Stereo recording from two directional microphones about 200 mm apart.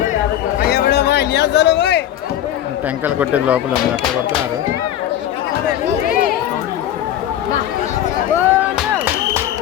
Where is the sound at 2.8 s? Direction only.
10° right (ahead or behind).